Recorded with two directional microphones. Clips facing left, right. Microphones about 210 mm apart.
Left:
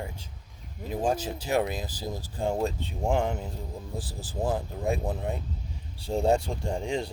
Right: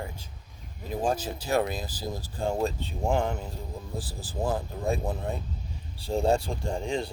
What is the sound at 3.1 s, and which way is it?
Speech, 20° left (ahead or behind).